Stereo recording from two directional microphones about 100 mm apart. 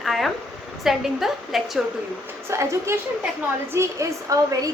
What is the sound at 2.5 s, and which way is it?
A woman's voice, 30° right (ahead or behind).